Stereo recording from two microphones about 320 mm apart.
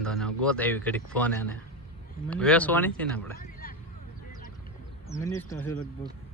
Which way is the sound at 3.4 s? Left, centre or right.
Left.